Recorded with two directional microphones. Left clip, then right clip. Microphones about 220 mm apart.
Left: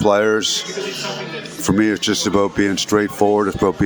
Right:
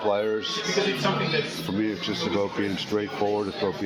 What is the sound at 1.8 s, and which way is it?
Speech, 55° left (ahead or behind).